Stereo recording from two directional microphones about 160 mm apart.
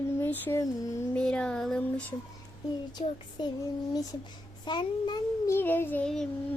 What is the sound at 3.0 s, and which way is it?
Child singing, 35° left (ahead or behind).